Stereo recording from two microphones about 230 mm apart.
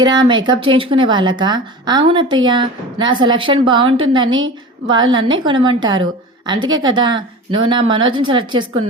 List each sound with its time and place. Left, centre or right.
0.0 s a woman's voice: centre